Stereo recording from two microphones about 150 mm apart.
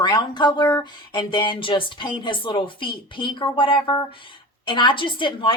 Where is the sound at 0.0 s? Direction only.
30° left (ahead or behind).